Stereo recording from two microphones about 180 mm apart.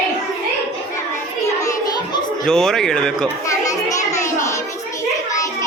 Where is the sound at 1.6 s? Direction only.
20° left (ahead or behind).